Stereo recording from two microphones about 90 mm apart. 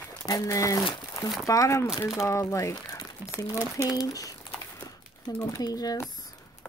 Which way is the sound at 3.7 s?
40° left (ahead or behind).